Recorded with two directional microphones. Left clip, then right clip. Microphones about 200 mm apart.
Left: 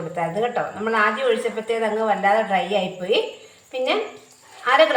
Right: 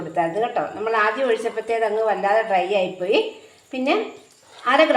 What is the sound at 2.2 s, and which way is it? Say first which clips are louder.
Speech: even; 45° right (ahead or behind).